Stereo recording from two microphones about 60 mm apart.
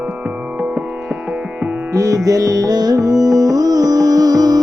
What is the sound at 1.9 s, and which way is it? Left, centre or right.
Music, right.